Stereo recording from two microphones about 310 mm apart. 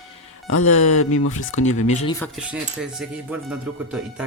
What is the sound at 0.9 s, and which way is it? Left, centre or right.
Speech, left.